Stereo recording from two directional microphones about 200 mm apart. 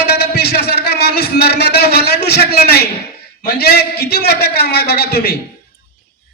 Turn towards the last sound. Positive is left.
turn(degrees=55)  # may be behind; listen again after turning